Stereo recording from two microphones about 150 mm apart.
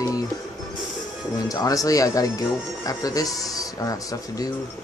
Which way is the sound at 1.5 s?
25° left (ahead or behind).